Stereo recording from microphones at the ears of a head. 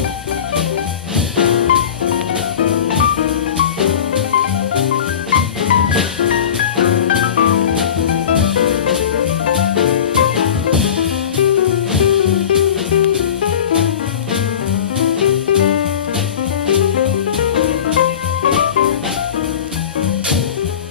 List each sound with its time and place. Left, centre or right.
1.3 s music: left
15.0 s music: left